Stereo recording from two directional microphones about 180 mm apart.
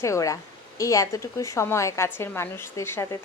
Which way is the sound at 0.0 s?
15° left (ahead or behind).